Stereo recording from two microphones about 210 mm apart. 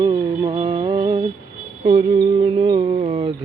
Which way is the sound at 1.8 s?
25° right (ahead or behind).